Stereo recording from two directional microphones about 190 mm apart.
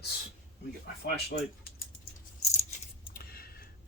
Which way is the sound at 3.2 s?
55° left (ahead or behind).